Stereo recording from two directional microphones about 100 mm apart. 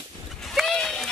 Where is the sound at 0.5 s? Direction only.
10° left (ahead or behind).